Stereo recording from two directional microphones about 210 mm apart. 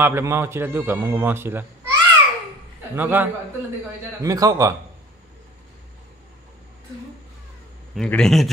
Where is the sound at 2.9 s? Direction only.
10° right (ahead or behind).